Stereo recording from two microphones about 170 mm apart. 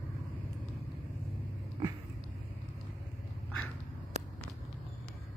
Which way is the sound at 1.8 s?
30° right (ahead or behind).